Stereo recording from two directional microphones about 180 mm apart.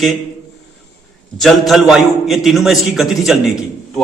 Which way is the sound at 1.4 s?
Centre (ahead or behind).